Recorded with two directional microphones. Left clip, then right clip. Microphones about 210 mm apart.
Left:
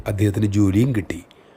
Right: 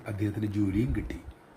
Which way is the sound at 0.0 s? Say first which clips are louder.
Left 11 dB; 55° left (ahead or behind).